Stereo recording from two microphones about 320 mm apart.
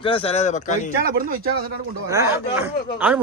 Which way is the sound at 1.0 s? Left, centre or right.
Right.